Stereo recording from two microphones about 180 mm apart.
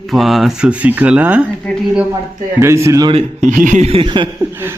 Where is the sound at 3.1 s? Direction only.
40° right (ahead or behind).